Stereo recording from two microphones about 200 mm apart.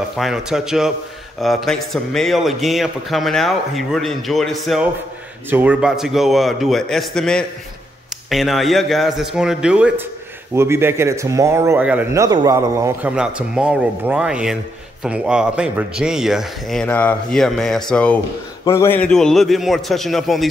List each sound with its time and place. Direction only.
0.2 s a man's voice: 5° right (ahead or behind)